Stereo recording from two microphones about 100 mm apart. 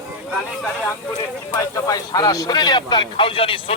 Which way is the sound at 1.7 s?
40° left (ahead or behind).